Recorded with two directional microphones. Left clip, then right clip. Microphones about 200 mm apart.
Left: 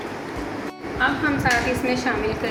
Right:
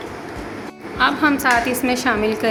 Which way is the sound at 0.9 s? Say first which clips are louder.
Right 5 dB; 45° right (ahead or behind).